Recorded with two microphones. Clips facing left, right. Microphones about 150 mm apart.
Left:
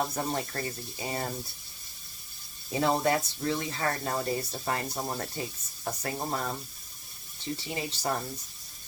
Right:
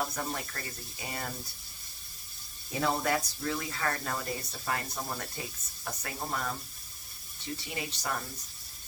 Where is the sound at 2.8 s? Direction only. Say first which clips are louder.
Left 4 dB; 25° left (ahead or behind).